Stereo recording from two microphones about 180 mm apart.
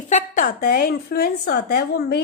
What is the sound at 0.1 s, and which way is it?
A woman's voice, 45° left (ahead or behind).